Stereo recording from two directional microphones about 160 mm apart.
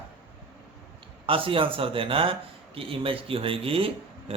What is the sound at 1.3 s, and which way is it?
Speech, 35° right (ahead or behind).